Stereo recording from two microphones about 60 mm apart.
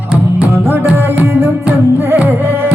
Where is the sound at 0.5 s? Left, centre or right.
Right.